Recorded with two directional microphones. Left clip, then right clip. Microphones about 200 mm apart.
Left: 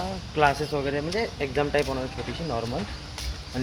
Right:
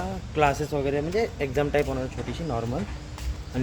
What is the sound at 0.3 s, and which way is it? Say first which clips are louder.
Speech: left 1 dB; 15° right (ahead or behind).